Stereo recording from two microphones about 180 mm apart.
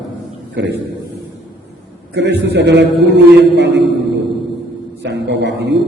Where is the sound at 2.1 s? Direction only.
75° right (ahead or behind).